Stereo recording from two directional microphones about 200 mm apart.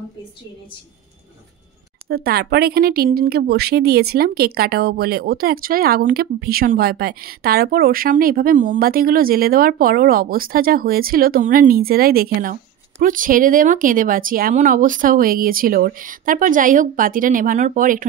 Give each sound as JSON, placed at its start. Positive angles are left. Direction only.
{"t": 2.0, "sound": "a woman's voice", "side_deg": -50}